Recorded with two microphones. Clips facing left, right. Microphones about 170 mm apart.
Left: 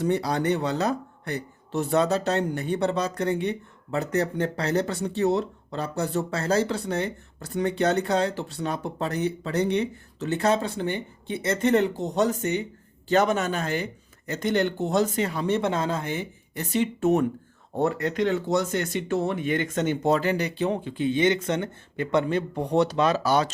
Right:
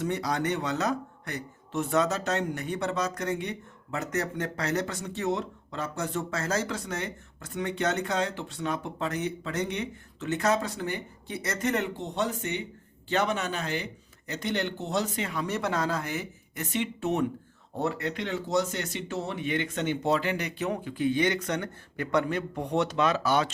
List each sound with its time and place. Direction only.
0.0 s speech: 30° left (ahead or behind)